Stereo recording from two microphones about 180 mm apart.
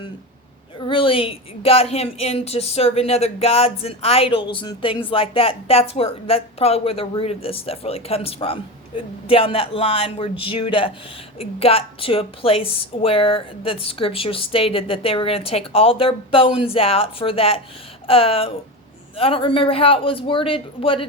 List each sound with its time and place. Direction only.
0.8 s a man's voice: 30° left (ahead or behind)